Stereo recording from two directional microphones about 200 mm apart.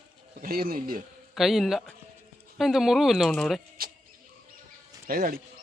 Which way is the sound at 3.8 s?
45° right (ahead or behind).